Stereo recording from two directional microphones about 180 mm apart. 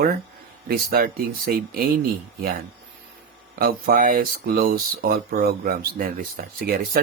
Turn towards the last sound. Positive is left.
turn(degrees=-55)  # may be behind; listen again after turning